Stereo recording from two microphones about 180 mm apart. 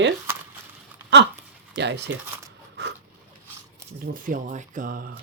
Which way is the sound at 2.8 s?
70° right (ahead or behind).